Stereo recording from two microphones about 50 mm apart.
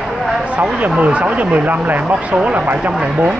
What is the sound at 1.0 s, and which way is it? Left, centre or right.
Speech, right.